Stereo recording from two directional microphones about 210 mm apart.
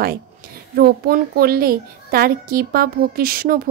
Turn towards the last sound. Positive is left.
turn(degrees=-45)  # may be behind; listen again after turning